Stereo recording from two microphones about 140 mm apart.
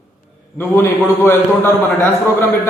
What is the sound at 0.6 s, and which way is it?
Speech, 15° left (ahead or behind).